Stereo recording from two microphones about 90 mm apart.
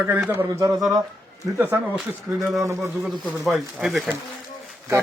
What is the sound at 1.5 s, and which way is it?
Speech, 25° right (ahead or behind).